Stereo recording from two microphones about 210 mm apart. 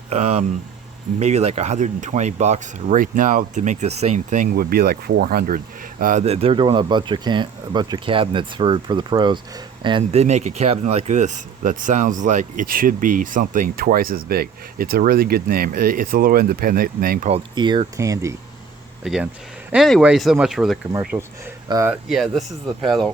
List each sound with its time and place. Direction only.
0.1 s speech: 30° right (ahead or behind)
17.3 s speech: 20° right (ahead or behind)
19.0 s speech: 5° right (ahead or behind)
22.1 s speech: centre (ahead or behind)